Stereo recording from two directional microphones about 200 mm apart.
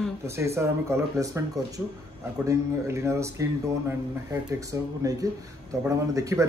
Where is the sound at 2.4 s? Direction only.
15° right (ahead or behind).